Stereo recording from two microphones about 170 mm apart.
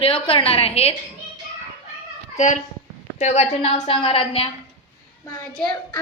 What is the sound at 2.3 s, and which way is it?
A woman's voice, 45° left (ahead or behind).